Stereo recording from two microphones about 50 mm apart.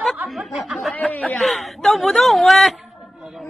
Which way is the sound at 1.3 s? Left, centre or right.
Centre.